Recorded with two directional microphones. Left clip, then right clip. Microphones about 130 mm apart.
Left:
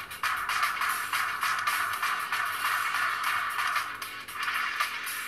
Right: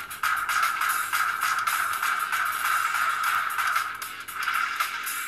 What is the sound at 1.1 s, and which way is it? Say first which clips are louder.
Music: right 4 dB; 40° left (ahead or behind).